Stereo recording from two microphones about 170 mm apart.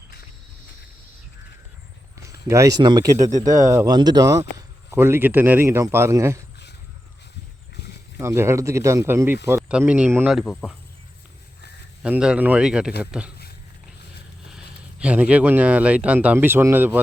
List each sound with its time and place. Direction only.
2.3 s speech: 20° right (ahead or behind)
8.2 s speech: 15° right (ahead or behind)
10.2 s speech: centre (ahead or behind)
12.0 s speech: 5° right (ahead or behind)
14.4 s speech: 5° right (ahead or behind)